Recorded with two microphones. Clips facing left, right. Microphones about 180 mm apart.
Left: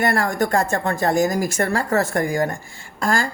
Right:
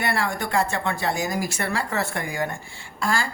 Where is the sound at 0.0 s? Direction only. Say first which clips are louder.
Left 6 dB; 45° left (ahead or behind).